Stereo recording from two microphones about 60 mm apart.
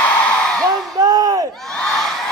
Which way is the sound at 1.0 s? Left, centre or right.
Right.